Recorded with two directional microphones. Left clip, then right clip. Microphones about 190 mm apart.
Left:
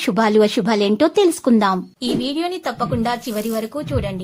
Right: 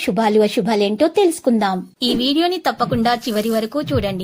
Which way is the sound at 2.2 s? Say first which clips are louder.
Right 5 dB; 25° right (ahead or behind).